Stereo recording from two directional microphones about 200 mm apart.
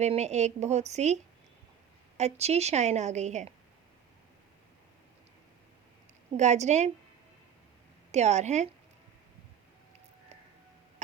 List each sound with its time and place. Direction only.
0.0 s a woman's voice: 35° right (ahead or behind)
6.3 s a woman's voice: 35° right (ahead or behind)
8.1 s a woman's voice: 35° right (ahead or behind)